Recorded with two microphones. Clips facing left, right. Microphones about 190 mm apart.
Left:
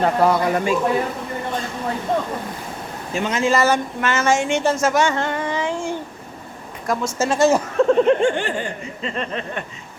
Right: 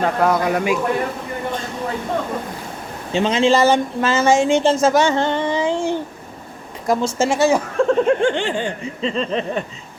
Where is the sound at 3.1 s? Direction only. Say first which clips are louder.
Right 4 dB; 25° right (ahead or behind).